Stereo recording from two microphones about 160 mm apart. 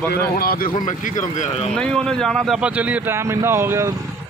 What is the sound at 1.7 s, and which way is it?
A man's voice, 5° left (ahead or behind).